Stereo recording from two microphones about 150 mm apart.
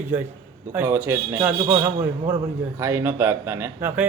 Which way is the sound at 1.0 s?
20° right (ahead or behind).